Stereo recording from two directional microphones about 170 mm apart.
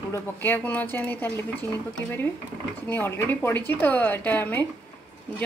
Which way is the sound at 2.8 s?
10° left (ahead or behind).